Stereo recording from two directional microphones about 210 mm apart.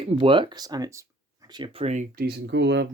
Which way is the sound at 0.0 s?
25° right (ahead or behind).